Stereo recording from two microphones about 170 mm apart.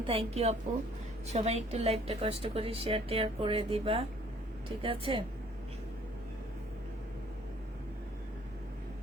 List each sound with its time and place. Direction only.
0.1 s a woman's voice: 35° right (ahead or behind)